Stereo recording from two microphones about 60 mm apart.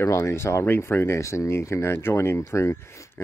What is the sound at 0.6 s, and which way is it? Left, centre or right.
Speech, left.